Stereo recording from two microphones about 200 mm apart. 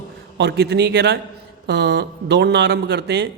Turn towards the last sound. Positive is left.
turn(degrees=-55)  # may be behind; listen again after turning